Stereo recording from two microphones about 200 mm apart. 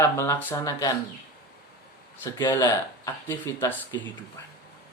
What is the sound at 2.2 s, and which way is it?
Speech, 20° left (ahead or behind).